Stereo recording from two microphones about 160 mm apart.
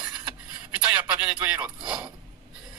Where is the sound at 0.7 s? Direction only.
10° right (ahead or behind).